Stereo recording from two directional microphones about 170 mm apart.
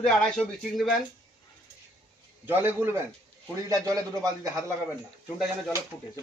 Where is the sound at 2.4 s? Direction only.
10° right (ahead or behind).